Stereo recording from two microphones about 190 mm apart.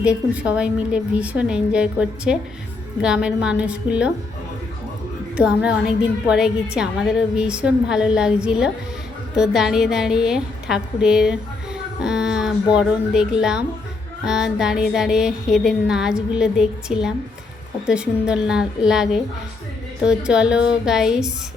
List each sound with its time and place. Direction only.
0.0 s a woman's voice: 5° right (ahead or behind)
5.4 s a woman's voice: 5° right (ahead or behind)